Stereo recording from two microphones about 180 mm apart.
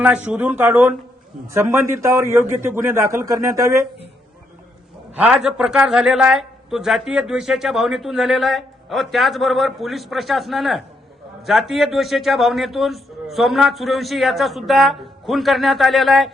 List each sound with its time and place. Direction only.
0.0 s a man's voice: 5° right (ahead or behind)
5.1 s a man's voice: 5° right (ahead or behind)